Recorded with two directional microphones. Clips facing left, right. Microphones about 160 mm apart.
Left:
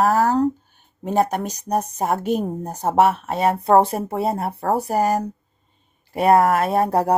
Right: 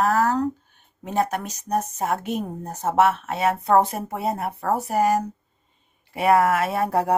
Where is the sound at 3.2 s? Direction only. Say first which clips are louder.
Left 3 dB; 30° left (ahead or behind).